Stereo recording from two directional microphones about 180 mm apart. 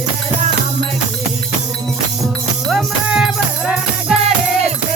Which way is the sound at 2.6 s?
Centre (ahead or behind).